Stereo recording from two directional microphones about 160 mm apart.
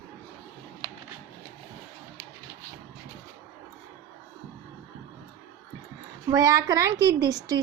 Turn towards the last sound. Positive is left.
turn(degrees=-25)  # may be behind; listen again after turning